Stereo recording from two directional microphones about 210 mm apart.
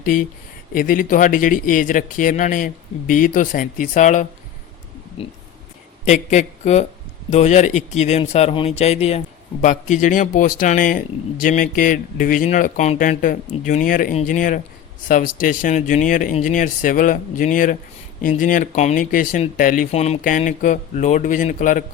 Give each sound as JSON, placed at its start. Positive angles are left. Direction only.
{"t": 0.0, "sound": "a man's voice", "side_deg": 40}
{"t": 6.1, "sound": "a man's voice", "side_deg": 35}